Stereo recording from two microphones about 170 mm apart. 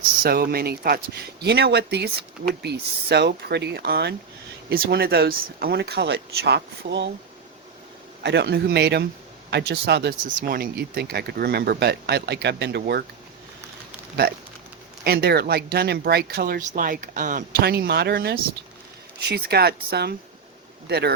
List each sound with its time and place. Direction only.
0.2 s speech: 65° right (ahead or behind); by 7.1 s 85° right
8.2 s a man's voice: 85° right
10.2 s speech: 60° right (ahead or behind); by 12.8 s 80° right
15.0 s speech: 70° right (ahead or behind)